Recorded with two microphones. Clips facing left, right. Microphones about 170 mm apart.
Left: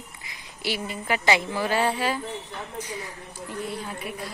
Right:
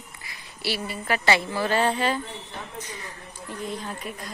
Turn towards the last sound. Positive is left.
turn(degrees=10)  # may be behind; listen again after turning